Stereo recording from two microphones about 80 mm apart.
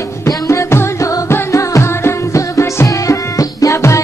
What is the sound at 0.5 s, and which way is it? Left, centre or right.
Music, left.